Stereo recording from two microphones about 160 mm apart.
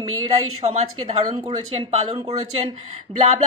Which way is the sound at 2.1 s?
40° right (ahead or behind).